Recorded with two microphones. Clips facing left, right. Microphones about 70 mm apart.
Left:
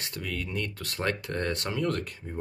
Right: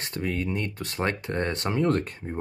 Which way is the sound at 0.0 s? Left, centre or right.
Right.